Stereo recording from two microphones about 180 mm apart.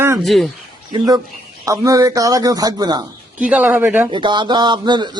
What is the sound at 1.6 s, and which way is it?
Speech, 20° right (ahead or behind).